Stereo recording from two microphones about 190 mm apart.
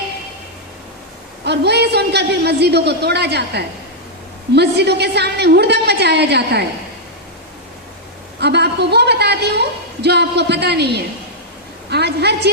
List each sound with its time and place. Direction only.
1.5 s a woman's voice: 60° right (ahead or behind)
8.4 s a woman's voice: 60° right (ahead or behind)